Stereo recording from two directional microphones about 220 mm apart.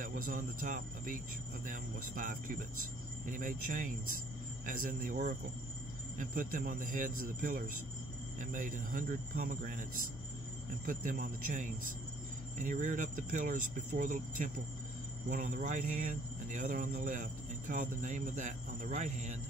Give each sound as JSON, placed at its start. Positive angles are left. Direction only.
{"t": 0.3, "sound": "speech", "side_deg": -35}
{"t": 10.9, "sound": "speech", "side_deg": -40}